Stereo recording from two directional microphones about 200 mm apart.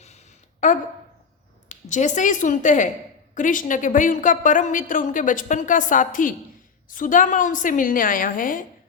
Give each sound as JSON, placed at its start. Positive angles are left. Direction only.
{"t": 0.6, "sound": "a woman's voice", "side_deg": 40}